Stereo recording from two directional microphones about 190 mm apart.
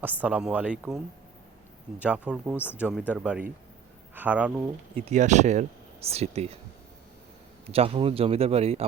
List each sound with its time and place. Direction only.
0.0 s speech: 10° right (ahead or behind)
2.0 s speech: 5° right (ahead or behind)
4.9 s speech: 35° right (ahead or behind)
7.7 s speech: 30° right (ahead or behind)